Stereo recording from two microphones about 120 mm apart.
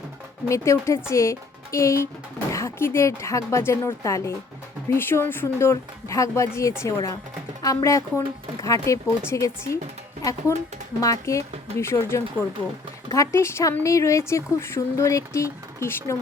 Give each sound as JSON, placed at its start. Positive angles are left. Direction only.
{"t": 0.4, "sound": "speech", "side_deg": 25}
{"t": 11.0, "sound": "speech", "side_deg": 25}